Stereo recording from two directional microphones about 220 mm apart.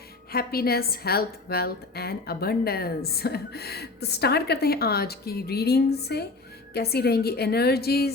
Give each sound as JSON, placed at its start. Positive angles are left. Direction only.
{"t": 0.3, "sound": "a woman's voice", "side_deg": 45}